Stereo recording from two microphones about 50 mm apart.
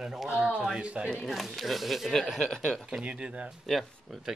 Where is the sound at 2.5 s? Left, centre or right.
Centre.